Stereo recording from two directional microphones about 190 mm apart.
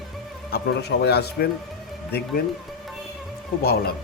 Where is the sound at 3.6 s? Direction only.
55° left (ahead or behind).